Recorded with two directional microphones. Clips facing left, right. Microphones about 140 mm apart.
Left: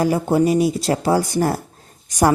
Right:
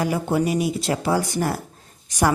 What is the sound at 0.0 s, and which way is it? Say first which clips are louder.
A woman's voice: left 5 dB; 35° left (ahead or behind).